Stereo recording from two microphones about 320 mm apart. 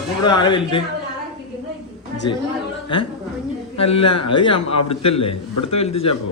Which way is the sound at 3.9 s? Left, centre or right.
Centre.